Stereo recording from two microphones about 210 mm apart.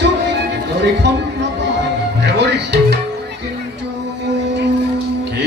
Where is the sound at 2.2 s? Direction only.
55° right (ahead or behind).